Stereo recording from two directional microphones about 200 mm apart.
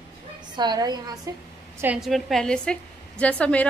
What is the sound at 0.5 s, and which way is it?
Speech, 20° right (ahead or behind).